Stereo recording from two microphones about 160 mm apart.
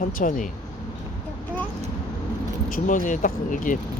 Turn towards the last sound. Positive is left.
turn(degrees=55)  # may be behind; listen again after turning